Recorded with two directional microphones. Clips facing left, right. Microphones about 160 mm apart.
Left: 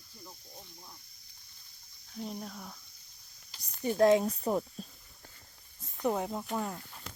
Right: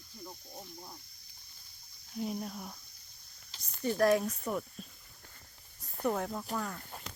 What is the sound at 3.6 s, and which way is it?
Speech, 20° left (ahead or behind).